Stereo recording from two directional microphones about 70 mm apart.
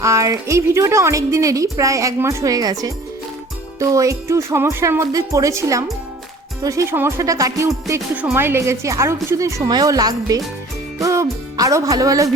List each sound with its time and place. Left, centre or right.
0.0 s a woman's voice: right
3.8 s a woman's voice: right
5.1 s a woman's voice: right
8.3 s a woman's voice: right
9.6 s music: right
11.0 s music: right